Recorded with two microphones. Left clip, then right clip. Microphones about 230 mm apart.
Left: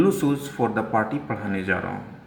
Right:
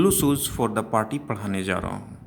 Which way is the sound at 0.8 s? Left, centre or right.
Right.